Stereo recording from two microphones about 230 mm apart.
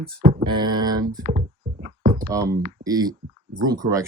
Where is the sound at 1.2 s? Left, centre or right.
Right.